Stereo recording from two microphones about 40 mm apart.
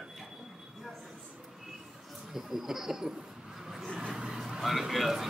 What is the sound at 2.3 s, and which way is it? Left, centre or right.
Speech, centre.